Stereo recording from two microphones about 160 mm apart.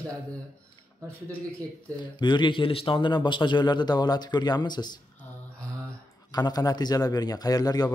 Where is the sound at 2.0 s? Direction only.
30° left (ahead or behind).